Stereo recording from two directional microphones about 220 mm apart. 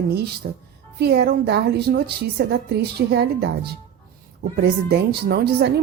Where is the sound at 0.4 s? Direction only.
40° right (ahead or behind).